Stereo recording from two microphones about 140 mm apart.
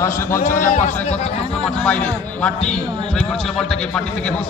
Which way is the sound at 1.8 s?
10° left (ahead or behind).